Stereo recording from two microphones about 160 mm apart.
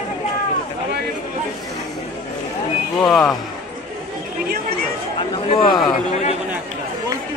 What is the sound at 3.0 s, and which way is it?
Speech, centre (ahead or behind).